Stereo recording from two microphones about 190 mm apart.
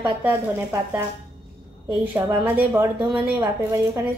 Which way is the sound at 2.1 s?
10° right (ahead or behind).